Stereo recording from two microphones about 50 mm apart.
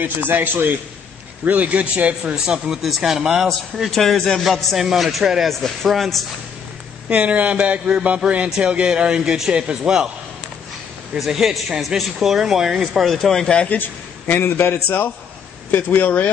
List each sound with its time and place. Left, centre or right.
0.0 s a man's voice: right
1.4 s a sound: right
2.3 s a man's voice: centre
5.5 s a man's voice: centre
7.1 s a sound: right
8.5 s speech: centre
11.1 s speech: centre
13.2 s speech: centre
13.7 s a man's voice: left
15.7 s speech: left